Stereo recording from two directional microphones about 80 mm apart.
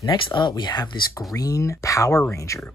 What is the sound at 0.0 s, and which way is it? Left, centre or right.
Speech, left.